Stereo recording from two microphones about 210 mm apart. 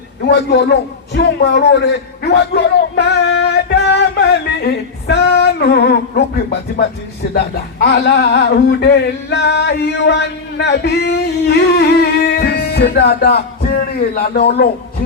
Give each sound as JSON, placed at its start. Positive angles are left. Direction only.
{"t": 0.3, "sound": "a man's voice", "side_deg": 55}